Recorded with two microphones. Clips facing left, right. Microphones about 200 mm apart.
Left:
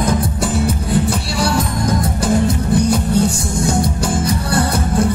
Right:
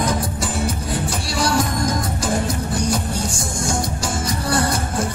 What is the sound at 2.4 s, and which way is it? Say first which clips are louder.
Music: left 7 dB; 60° left (ahead or behind).